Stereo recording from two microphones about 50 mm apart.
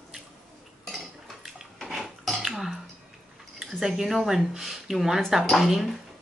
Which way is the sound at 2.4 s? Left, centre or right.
Centre.